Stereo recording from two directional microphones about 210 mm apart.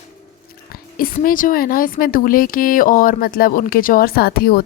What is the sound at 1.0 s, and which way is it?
Speech, 40° left (ahead or behind).